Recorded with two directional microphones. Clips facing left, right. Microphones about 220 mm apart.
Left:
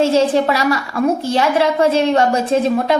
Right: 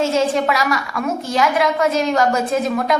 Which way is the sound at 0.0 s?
30° left (ahead or behind).